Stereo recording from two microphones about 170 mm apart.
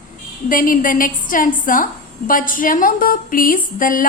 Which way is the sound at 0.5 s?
55° left (ahead or behind).